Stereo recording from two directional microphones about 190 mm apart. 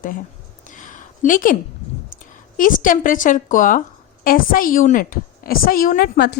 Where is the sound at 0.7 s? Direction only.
40° left (ahead or behind).